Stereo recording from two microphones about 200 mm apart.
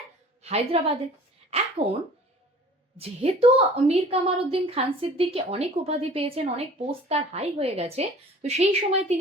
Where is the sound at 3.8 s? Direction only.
30° right (ahead or behind).